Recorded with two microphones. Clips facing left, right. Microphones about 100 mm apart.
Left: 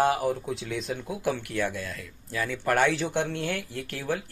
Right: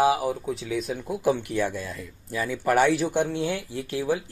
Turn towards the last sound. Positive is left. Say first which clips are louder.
# right 5 dB
turn(degrees=-15)  # may be behind; listen again after turning